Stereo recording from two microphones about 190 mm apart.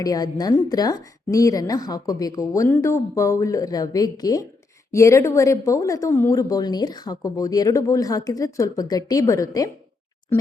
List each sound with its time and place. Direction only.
0.0 s a woman's voice: 20° left (ahead or behind)